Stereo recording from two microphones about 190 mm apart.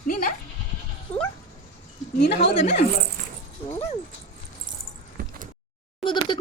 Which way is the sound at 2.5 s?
35° left (ahead or behind).